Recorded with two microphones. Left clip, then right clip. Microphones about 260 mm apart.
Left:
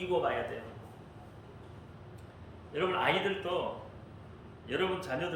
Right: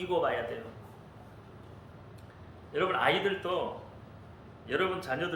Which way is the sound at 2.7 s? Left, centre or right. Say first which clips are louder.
Right 2 dB; centre.